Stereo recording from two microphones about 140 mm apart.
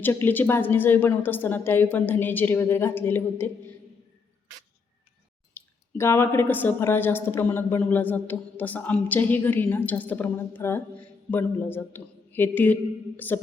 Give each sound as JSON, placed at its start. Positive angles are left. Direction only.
{"t": 0.0, "sound": "a man's voice", "side_deg": 15}
{"t": 5.5, "sound": "a man's voice", "side_deg": 20}